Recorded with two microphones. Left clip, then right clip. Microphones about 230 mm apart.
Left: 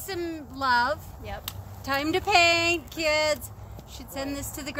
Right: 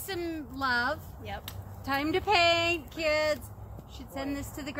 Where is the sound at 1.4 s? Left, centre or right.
Left.